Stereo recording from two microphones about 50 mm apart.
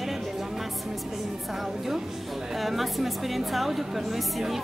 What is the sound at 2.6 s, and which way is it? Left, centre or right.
A woman's voice, centre.